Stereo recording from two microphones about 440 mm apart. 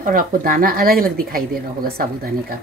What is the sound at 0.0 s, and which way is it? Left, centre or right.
Speech, centre.